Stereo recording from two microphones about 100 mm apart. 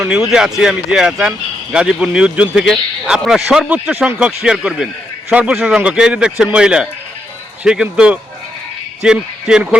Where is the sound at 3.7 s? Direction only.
15° right (ahead or behind).